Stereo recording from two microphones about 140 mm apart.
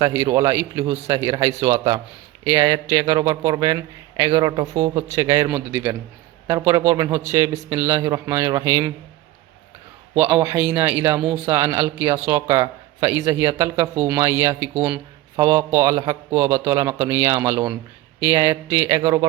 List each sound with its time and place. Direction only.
0.0 s a man's voice: 25° right (ahead or behind)
5.5 s a man's voice: 10° right (ahead or behind)
10.2 s a man's voice: 15° right (ahead or behind)